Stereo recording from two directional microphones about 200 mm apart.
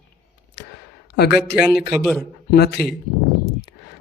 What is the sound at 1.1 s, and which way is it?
Speech, 55° left (ahead or behind).